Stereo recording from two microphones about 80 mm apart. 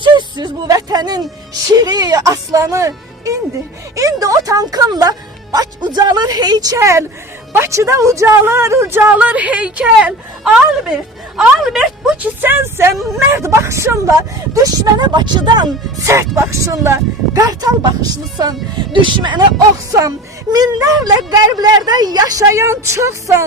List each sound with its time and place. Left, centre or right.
0.0 s speech: right
6.7 s speech: right
9.1 s a woman's voice: centre
12.2 s speech: right
12.9 s speech: centre
13.1 s speech: right
14.9 s speech: right
16.0 s speech: right
17.4 s speech: right
18.9 s speech: right
19.9 s speech: right
22.4 s speech: right